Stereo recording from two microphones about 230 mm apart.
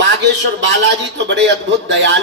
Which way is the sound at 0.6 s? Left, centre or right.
Right.